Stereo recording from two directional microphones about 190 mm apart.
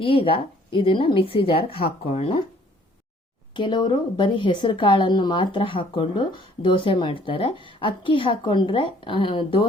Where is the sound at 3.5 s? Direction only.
25° left (ahead or behind).